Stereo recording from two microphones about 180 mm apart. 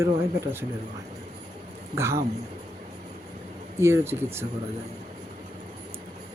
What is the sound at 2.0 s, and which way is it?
Speech, 15° right (ahead or behind).